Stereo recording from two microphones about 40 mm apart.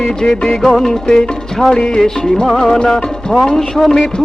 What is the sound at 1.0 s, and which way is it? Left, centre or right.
Music, centre.